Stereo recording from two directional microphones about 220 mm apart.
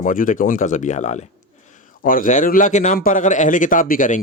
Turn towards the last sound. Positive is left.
turn(degrees=35)  # may be behind; listen again after turning